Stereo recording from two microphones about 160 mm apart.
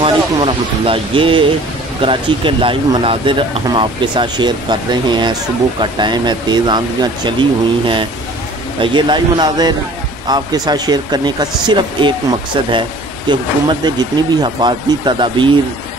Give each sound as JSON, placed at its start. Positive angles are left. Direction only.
{"t": 0.0, "sound": "speech", "side_deg": -35}